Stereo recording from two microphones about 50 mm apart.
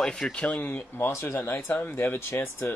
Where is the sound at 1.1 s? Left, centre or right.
Left.